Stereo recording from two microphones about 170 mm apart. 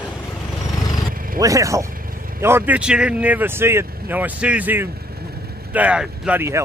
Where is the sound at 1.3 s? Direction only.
20° right (ahead or behind).